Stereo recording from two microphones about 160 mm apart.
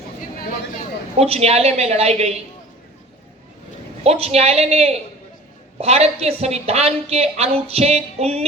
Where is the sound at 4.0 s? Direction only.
40° right (ahead or behind).